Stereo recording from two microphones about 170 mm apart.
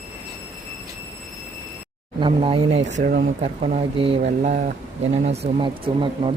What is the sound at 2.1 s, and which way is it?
Speech, 30° right (ahead or behind).